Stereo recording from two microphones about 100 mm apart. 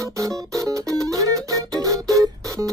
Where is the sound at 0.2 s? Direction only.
35° right (ahead or behind).